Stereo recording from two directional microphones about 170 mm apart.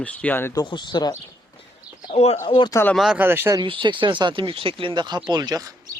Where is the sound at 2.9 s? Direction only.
5° right (ahead or behind).